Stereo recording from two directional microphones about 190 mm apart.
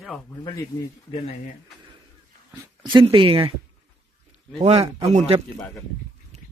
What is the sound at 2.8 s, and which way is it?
Speech, 25° right (ahead or behind).